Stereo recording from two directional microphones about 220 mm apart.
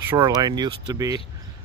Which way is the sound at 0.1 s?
15° right (ahead or behind).